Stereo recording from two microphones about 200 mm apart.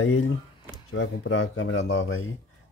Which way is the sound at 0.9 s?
75° left (ahead or behind).